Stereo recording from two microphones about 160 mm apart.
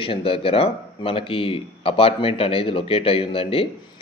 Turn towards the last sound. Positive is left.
turn(degrees=35)  # may be behind; listen again after turning